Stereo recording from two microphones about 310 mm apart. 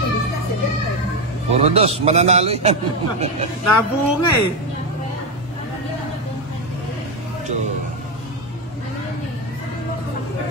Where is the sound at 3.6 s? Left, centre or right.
Left.